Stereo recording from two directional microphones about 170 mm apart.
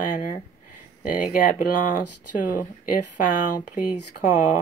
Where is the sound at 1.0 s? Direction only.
55° left (ahead or behind).